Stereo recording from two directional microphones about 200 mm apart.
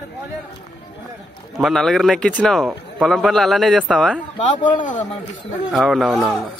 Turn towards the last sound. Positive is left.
turn(degrees=0)  # may be behind; listen again after turning